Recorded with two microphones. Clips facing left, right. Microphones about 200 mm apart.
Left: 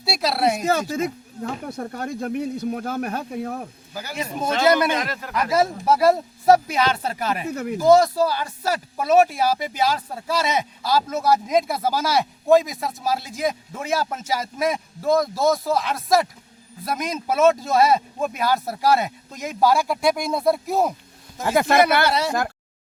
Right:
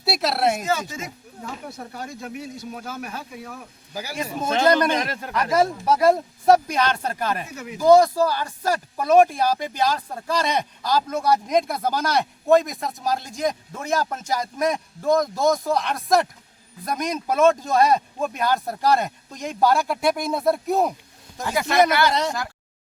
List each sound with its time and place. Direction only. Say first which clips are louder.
0.0 s speech: even; centre (ahead or behind)
0.6 s speech: left 5 dB; 55° left (ahead or behind)
3.9 s a man's voice: right 1 dB; 10° right (ahead or behind)
4.4 s speech: even; 10° left (ahead or behind)
4.9 s speech: right 1 dB; 25° right (ahead or behind)
5.3 s speech: even; 10° left (ahead or behind)
7.4 s speech: left 9 dB; 55° left (ahead or behind)
7.8 s speech: right 1 dB; 10° left (ahead or behind)
21.4 s speech: left 2 dB; 50° left (ahead or behind)